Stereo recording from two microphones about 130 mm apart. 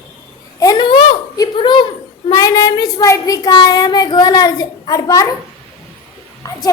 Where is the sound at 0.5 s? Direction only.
30° left (ahead or behind).